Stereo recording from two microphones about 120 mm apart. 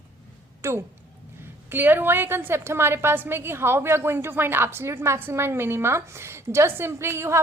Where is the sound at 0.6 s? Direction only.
25° right (ahead or behind).